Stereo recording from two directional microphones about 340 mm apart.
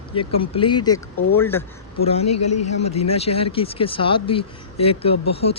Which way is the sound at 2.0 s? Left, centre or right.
Centre.